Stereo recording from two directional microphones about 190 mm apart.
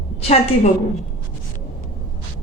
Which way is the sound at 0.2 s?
35° left (ahead or behind).